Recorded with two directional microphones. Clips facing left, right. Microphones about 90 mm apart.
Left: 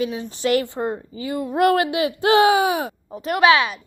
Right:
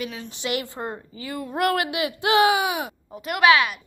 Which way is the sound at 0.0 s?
25° left (ahead or behind).